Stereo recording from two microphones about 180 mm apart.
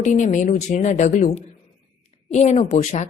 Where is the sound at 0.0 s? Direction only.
40° left (ahead or behind).